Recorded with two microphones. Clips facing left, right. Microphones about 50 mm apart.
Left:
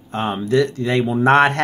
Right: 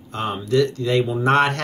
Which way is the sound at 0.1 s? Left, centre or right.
Left.